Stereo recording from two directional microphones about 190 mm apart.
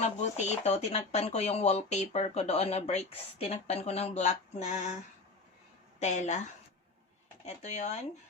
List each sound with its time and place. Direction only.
0.2 s speech: 35° left (ahead or behind)
6.0 s speech: 35° left (ahead or behind)
7.4 s speech: 35° left (ahead or behind)